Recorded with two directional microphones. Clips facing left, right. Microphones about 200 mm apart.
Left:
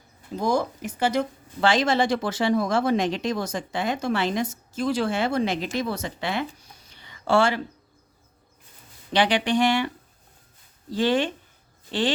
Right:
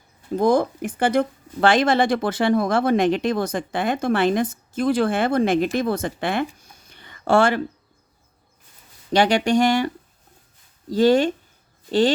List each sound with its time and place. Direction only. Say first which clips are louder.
0.3 s speech: right 6 dB; 55° right (ahead or behind)
9.1 s speech: right 4 dB; 45° right (ahead or behind)